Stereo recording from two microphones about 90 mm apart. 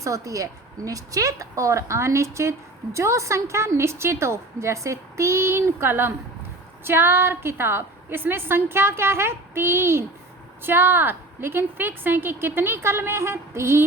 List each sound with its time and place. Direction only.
0.0 s a woman's voice: 35° right (ahead or behind)